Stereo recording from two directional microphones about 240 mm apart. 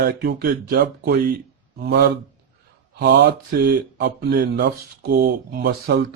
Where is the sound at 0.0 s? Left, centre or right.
Right.